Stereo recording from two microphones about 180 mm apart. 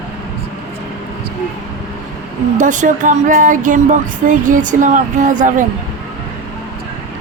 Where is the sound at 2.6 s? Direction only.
45° right (ahead or behind).